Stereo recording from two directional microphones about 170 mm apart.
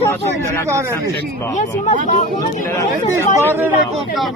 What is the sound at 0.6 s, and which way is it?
Speech, 15° right (ahead or behind).